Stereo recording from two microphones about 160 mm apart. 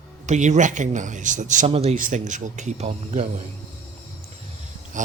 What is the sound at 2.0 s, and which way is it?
Speech, 55° right (ahead or behind).